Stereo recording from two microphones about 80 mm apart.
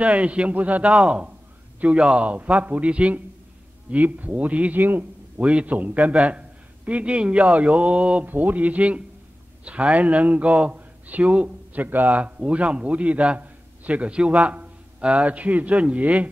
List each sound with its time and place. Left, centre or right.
0.0 s a man's voice: centre